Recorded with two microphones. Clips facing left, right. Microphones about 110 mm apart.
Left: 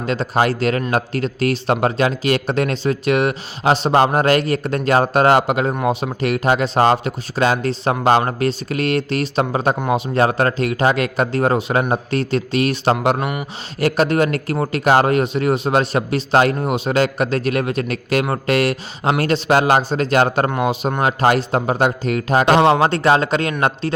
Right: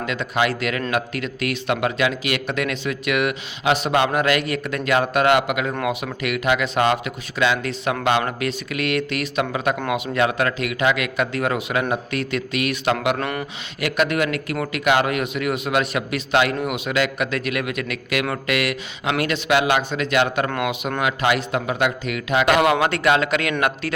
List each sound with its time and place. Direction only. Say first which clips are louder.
0.0 s a man's voice: left 4 dB; 35° left (ahead or behind)
13.1 s speech: left 3 dB; 15° left (ahead or behind)
13.7 s a man's voice: left 5 dB; 35° left (ahead or behind)